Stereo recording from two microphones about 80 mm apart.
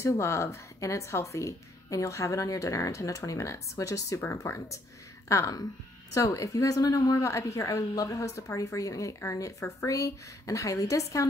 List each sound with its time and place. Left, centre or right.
0.0 s a woman's voice: left